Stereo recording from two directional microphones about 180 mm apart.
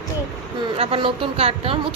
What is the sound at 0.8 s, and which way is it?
Speech, 30° right (ahead or behind).